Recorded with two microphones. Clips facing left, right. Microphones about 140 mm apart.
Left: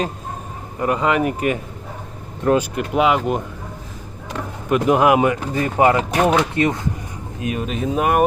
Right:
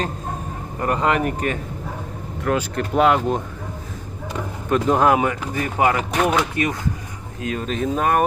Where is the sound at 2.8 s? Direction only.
5° left (ahead or behind).